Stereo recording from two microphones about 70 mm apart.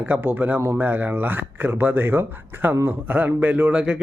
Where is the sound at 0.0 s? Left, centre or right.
Right.